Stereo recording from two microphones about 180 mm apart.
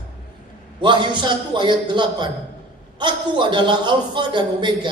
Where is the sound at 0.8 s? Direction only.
25° right (ahead or behind).